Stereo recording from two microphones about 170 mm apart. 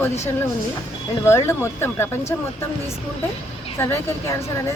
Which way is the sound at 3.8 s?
15° left (ahead or behind).